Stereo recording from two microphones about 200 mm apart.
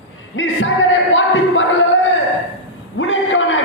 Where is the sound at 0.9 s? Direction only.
70° left (ahead or behind).